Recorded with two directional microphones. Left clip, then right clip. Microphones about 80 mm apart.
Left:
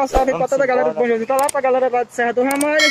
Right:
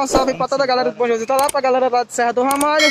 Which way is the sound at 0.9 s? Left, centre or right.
Right.